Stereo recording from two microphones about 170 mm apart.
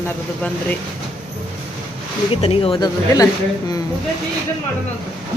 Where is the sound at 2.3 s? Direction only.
35° left (ahead or behind).